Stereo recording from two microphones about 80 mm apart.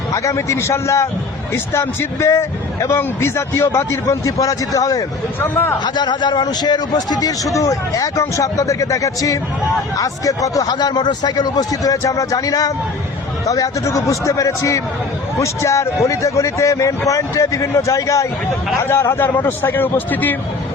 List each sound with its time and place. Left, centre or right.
0.1 s a man's voice: left
5.4 s a man's voice: left
5.8 s a man's voice: left